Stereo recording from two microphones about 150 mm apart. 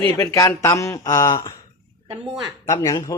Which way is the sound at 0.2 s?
20° left (ahead or behind).